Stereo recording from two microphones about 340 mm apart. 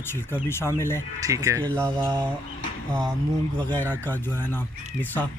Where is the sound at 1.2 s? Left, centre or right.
Centre.